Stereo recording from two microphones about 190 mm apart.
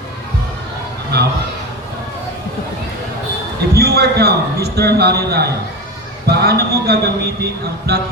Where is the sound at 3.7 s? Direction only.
55° right (ahead or behind).